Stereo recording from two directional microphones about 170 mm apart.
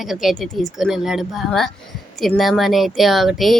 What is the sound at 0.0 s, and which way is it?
A woman's voice, centre (ahead or behind).